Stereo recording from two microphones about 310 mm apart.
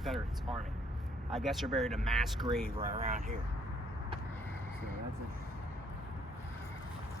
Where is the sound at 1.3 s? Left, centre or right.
Centre.